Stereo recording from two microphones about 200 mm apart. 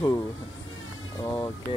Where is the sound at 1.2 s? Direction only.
15° left (ahead or behind).